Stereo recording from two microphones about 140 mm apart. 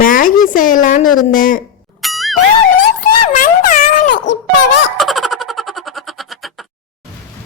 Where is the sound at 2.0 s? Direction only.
Centre (ahead or behind).